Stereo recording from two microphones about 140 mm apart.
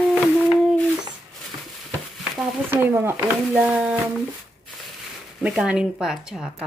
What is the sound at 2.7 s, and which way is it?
Speech, 15° right (ahead or behind).